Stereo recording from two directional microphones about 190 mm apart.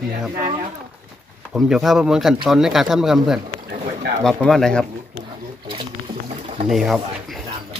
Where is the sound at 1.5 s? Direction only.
Centre (ahead or behind).